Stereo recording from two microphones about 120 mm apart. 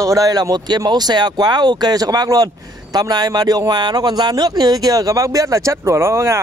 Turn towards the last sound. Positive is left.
turn(degrees=-25)  # may be behind; listen again after turning